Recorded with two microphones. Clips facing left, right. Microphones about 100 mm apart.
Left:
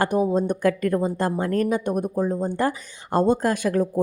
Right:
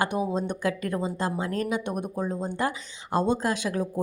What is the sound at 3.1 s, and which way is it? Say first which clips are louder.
Speech: left 5 dB; 50° left (ahead or behind).